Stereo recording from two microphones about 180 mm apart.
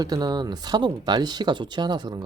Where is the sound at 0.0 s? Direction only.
20° right (ahead or behind).